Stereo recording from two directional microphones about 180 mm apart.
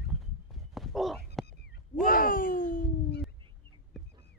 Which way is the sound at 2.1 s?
50° left (ahead or behind).